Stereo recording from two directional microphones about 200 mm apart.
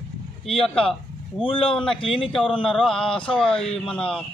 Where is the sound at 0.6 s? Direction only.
5° left (ahead or behind).